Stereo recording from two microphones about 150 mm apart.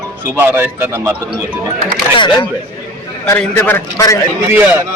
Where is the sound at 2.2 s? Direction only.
30° left (ahead or behind).